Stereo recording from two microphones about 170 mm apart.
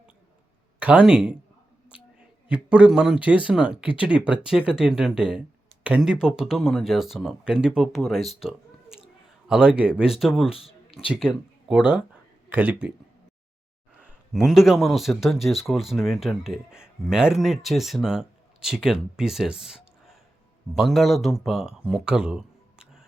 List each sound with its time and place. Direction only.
0.8 s speech: 10° right (ahead or behind)
2.5 s speech: 10° right (ahead or behind)
10.5 s speech: 35° left (ahead or behind)
11.1 s speech: 5° right (ahead or behind)
14.0 s speech: centre (ahead or behind)